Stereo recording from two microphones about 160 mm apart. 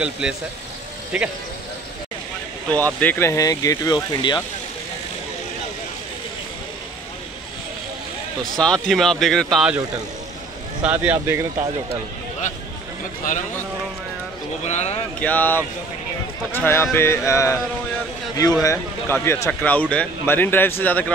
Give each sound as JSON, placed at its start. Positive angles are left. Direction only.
{"t": 0.0, "sound": "speech", "side_deg": -5}
{"t": 2.7, "sound": "speech", "side_deg": 10}
{"t": 8.5, "sound": "speech", "side_deg": 5}
{"t": 10.8, "sound": "speech", "side_deg": -10}
{"t": 14.6, "sound": "a man's voice", "side_deg": 45}
{"t": 15.1, "sound": "a man's voice", "side_deg": 10}